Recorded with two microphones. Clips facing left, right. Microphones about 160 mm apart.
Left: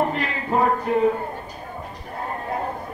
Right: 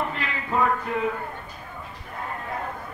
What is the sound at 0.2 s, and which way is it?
Speech, 35° left (ahead or behind).